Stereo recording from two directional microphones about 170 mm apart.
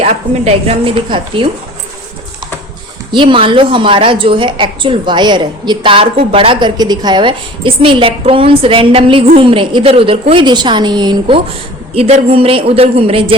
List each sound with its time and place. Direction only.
0.0 s a woman's voice: 35° right (ahead or behind)
3.1 s a woman's voice: 30° right (ahead or behind)
11.9 s a woman's voice: 35° right (ahead or behind)